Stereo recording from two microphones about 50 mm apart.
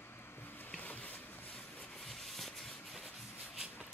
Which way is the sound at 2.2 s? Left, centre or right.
Centre.